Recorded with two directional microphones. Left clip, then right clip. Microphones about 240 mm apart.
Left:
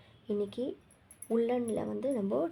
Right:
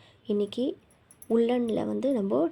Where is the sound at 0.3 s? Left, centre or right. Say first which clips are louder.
Right 6 dB; right.